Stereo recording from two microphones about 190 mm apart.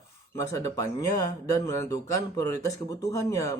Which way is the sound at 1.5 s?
20° left (ahead or behind).